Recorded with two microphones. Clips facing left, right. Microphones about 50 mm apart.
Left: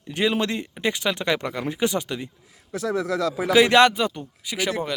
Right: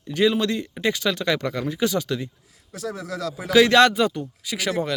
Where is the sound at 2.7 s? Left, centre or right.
Left.